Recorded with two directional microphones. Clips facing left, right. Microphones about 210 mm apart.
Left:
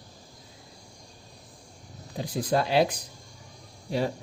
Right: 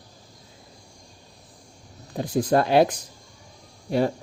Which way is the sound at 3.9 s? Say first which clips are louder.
Right 5 dB; 55° right (ahead or behind).